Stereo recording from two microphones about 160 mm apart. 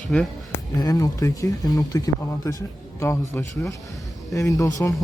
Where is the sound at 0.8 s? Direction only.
25° left (ahead or behind).